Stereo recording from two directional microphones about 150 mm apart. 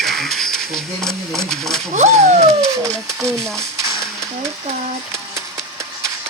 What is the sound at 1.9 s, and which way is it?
Speech, 50° right (ahead or behind).